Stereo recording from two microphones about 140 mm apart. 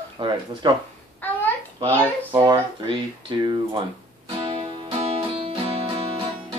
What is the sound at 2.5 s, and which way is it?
Speech, 35° right (ahead or behind).